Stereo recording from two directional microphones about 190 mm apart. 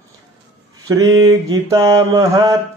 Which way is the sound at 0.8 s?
15° right (ahead or behind).